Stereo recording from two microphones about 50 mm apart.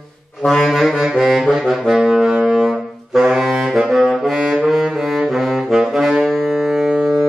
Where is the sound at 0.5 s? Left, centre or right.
Centre.